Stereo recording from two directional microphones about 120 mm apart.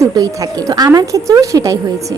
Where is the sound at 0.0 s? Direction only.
30° right (ahead or behind).